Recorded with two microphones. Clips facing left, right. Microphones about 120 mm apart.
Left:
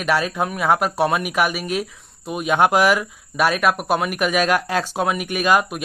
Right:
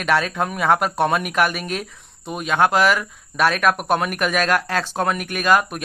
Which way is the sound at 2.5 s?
15° left (ahead or behind).